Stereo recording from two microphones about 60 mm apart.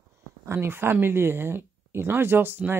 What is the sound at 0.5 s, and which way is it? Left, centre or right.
Speech, right.